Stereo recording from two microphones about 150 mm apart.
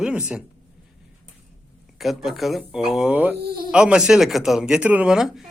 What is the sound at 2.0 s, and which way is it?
Speech, centre (ahead or behind).